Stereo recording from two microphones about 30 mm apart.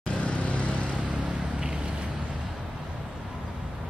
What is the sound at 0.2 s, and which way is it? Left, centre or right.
Vehicle, left.